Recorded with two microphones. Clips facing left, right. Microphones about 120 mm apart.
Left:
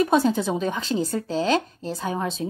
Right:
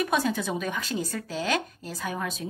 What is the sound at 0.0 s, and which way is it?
Speech, 30° left (ahead or behind).